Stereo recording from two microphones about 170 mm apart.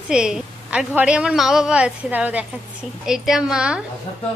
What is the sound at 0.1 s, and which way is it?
A woman's voice, 5° right (ahead or behind).